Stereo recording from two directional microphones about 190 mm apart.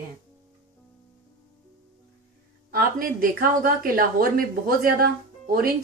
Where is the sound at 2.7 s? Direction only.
50° right (ahead or behind).